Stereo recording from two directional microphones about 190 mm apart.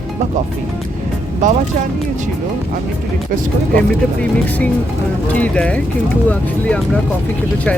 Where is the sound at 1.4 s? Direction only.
40° right (ahead or behind).